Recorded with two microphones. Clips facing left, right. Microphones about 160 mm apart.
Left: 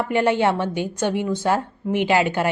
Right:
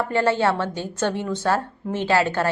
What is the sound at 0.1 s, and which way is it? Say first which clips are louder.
A woman's voice: left 2 dB; 15° left (ahead or behind).